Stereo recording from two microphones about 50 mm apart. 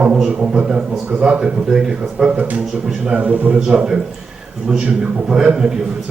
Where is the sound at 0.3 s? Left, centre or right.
Right.